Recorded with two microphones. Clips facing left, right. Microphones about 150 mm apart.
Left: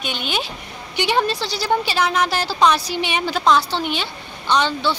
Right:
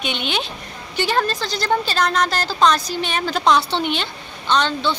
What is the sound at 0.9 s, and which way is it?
A woman's voice, 15° left (ahead or behind).